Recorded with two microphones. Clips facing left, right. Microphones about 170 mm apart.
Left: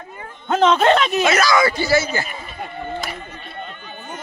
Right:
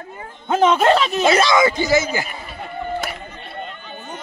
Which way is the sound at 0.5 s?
10° right (ahead or behind).